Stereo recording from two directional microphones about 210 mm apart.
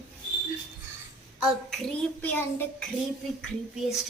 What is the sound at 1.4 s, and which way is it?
A child's voice, 5° left (ahead or behind).